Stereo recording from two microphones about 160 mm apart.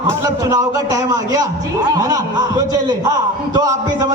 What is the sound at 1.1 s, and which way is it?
A man's voice, 20° right (ahead or behind).